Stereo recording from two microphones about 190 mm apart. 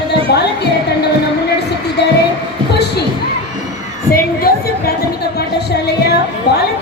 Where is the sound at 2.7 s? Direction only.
60° left (ahead or behind).